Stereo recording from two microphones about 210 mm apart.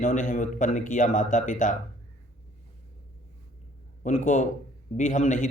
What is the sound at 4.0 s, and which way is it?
A man's voice, 35° left (ahead or behind).